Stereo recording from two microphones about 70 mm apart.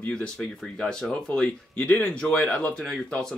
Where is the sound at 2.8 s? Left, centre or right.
Centre.